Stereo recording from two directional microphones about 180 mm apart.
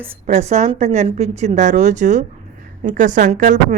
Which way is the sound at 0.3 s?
40° right (ahead or behind).